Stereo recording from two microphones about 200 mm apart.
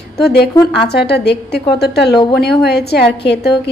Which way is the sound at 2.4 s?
55° left (ahead or behind).